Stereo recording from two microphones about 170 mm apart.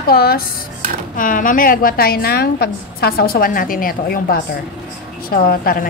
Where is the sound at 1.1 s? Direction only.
50° left (ahead or behind).